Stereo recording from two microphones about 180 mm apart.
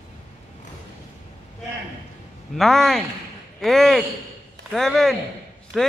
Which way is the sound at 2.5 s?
Centre (ahead or behind).